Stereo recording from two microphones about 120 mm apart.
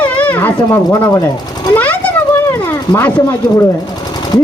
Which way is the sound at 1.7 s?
15° left (ahead or behind).